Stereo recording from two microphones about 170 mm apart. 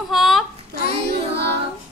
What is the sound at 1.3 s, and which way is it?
Music, 80° right.